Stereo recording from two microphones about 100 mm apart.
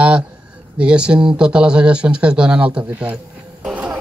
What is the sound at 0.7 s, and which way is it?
Speech, 10° right (ahead or behind).